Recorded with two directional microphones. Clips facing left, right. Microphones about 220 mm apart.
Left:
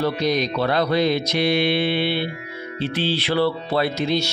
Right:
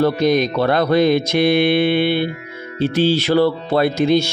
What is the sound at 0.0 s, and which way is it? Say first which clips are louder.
Speech: right 6 dB; 50° right (ahead or behind).